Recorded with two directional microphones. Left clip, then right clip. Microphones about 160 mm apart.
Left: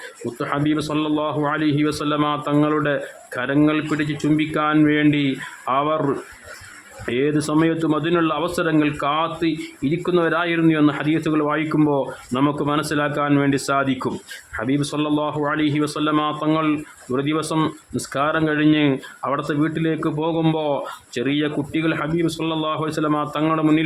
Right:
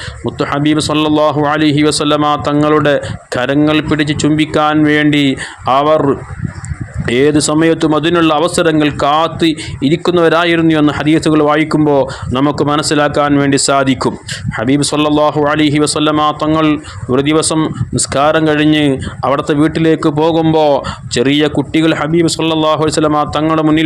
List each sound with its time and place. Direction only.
0.3 s a man's voice: 40° right (ahead or behind)